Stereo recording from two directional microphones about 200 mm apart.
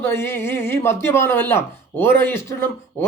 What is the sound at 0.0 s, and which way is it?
Speech, 10° left (ahead or behind).